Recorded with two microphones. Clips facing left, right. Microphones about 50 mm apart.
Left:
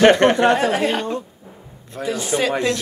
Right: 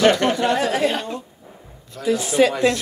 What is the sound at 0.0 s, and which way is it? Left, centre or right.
Speech, left.